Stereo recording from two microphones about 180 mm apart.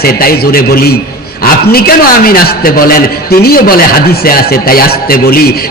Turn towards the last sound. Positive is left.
turn(degrees=55)  # may be behind; listen again after turning